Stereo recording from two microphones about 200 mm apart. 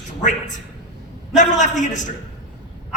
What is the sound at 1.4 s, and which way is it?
Speech, 35° left (ahead or behind).